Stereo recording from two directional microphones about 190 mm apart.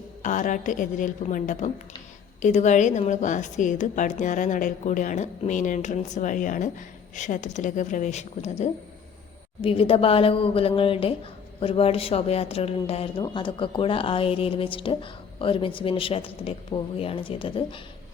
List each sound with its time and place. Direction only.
0.2 s a woman's voice: 40° left (ahead or behind)